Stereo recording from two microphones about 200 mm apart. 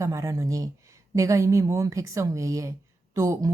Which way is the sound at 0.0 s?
15° right (ahead or behind).